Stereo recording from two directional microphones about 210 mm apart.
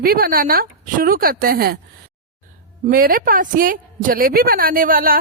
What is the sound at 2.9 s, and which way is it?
Speech, 45° right (ahead or behind).